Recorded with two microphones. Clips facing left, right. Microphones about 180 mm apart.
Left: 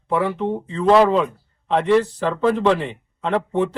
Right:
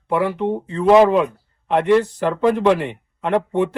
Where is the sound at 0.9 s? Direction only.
20° right (ahead or behind).